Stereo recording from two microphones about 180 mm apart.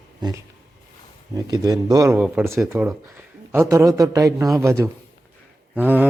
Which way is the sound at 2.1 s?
5° right (ahead or behind).